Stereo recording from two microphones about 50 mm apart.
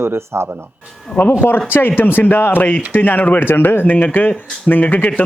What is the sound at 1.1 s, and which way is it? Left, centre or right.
Speech, left.